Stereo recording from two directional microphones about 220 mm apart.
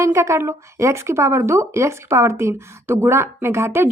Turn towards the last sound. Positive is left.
turn(degrees=-10)  # may be behind; listen again after turning